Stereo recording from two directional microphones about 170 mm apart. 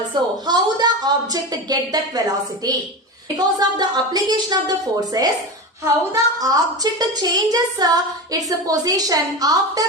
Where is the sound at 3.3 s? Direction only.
25° right (ahead or behind).